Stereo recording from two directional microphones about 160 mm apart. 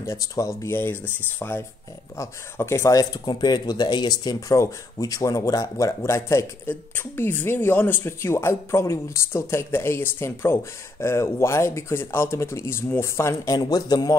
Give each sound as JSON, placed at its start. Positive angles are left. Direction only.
{"t": 0.0, "sound": "speech", "side_deg": 20}